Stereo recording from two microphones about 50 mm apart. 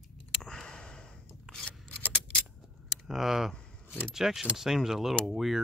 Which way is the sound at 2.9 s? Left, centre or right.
Centre.